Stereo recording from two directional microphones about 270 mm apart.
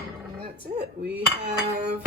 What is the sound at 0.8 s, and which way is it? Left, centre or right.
Dishes, right.